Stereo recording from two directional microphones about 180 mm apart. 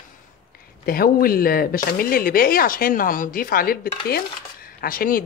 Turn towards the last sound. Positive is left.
turn(degrees=55)  # may be behind; listen again after turning